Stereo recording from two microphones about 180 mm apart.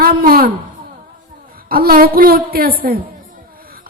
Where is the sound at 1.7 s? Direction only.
55° right (ahead or behind).